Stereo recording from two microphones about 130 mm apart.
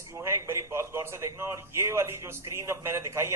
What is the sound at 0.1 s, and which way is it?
A man's voice, 20° right (ahead or behind).